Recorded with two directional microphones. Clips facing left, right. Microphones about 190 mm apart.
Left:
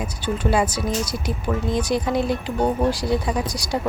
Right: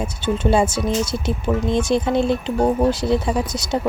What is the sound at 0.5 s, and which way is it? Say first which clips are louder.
Speech: right 3 dB; 25° right (ahead or behind).